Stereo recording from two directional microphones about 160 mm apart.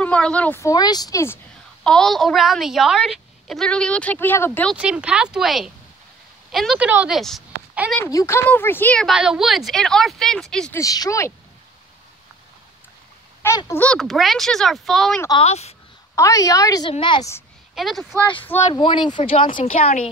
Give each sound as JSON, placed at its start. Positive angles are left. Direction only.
{"t": 0.0, "sound": "a woman's voice", "side_deg": 5}
{"t": 1.9, "sound": "a woman's voice", "side_deg": 5}
{"t": 4.7, "sound": "a woman's voice", "side_deg": -5}
{"t": 7.2, "sound": "a woman's voice", "side_deg": 0}
{"t": 7.9, "sound": "a woman's voice", "side_deg": 15}
{"t": 9.1, "sound": "a woman's voice", "side_deg": -5}
{"t": 10.7, "sound": "a woman's voice", "side_deg": 20}
{"t": 13.4, "sound": "a woman's voice", "side_deg": 15}
{"t": 15.4, "sound": "speech", "side_deg": 40}
{"t": 16.2, "sound": "a woman's voice", "side_deg": 20}
{"t": 17.7, "sound": "speech", "side_deg": 0}
{"t": 18.6, "sound": "speech", "side_deg": 35}